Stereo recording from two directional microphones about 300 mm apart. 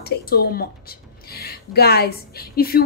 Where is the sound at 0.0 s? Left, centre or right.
Left.